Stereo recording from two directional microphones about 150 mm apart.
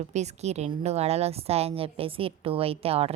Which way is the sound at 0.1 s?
50° right (ahead or behind).